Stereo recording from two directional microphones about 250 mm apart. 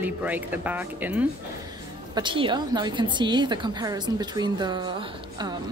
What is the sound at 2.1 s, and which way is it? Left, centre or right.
Speech, centre.